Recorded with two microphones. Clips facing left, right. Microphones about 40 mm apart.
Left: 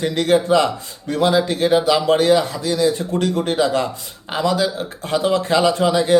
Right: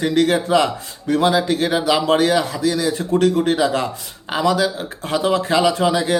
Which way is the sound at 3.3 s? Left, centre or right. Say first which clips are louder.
Right 1 dB; right.